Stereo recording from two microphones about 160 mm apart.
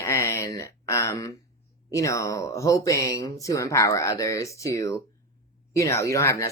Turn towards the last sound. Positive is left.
turn(degrees=20)  # may be behind; listen again after turning